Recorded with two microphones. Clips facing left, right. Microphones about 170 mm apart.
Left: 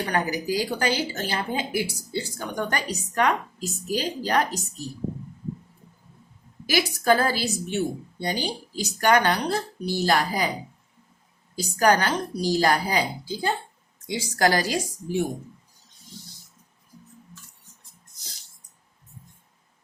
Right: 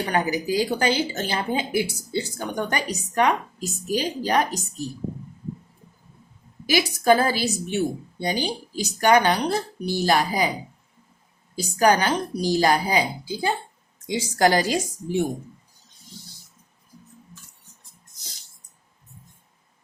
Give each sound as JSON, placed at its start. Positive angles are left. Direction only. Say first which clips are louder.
{"t": 0.1, "sound": "a woman's voice", "louder": "right 3 dB", "side_deg": -20}
{"t": 6.7, "sound": "a woman's voice", "louder": "right 3 dB", "side_deg": -15}
{"t": 11.5, "sound": "a woman's voice", "louder": "right 1 dB", "side_deg": -15}